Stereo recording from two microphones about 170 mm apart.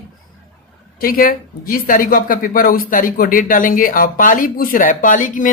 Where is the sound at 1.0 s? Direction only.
55° left (ahead or behind).